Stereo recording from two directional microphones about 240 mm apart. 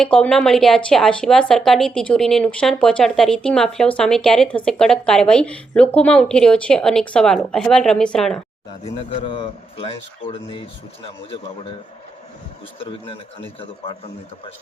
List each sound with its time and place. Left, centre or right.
0.0 s speech: centre
9.0 s a man's voice: left